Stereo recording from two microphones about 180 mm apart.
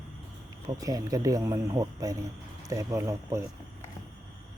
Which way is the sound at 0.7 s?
20° right (ahead or behind).